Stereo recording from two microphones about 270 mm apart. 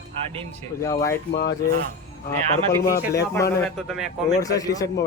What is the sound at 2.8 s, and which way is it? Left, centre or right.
A man's voice, centre.